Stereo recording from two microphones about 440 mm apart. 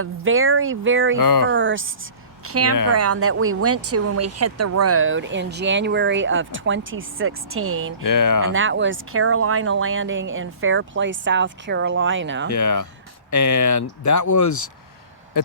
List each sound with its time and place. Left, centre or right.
0.0 s speech: right
1.2 s speech: left
1.5 s a woman's voice: right
8.0 s speech: left
8.5 s speech: right
12.5 s speech: left